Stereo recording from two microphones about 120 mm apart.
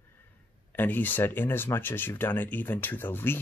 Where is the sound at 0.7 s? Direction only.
15° left (ahead or behind).